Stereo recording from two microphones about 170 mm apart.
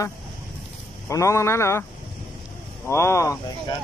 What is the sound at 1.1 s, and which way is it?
Speech, 15° left (ahead or behind).